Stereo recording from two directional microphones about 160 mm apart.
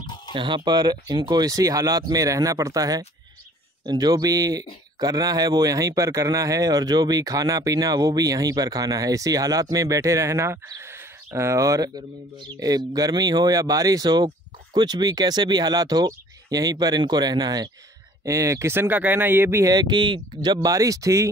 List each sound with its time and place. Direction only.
0.3 s speech: 30° right (ahead or behind)